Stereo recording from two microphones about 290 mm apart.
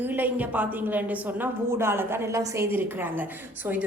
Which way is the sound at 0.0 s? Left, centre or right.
Centre.